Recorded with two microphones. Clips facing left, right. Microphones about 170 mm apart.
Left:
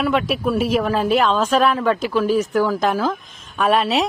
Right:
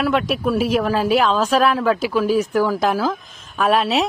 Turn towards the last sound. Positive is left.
turn(degrees=0)  # may be behind; listen again after turning